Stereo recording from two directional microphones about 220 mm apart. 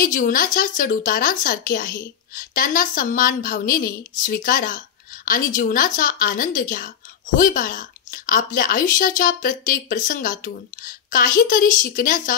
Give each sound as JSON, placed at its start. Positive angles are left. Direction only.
{"t": 0.0, "sound": "speech", "side_deg": 40}